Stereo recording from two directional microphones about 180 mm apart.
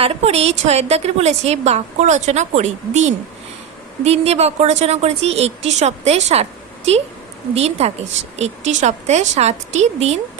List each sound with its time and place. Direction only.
0.0 s a woman's voice: 35° right (ahead or behind)